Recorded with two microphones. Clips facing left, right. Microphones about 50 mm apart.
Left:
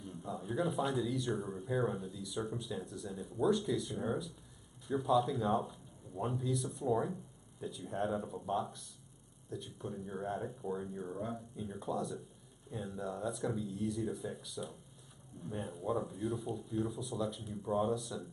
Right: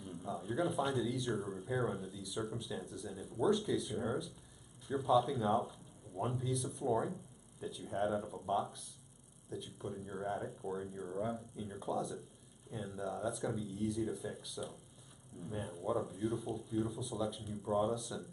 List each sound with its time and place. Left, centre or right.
0.0 s speech: centre